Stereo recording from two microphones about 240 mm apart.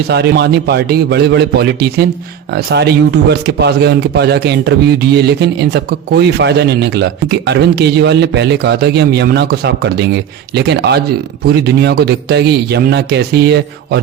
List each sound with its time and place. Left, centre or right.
0.1 s a man's voice: right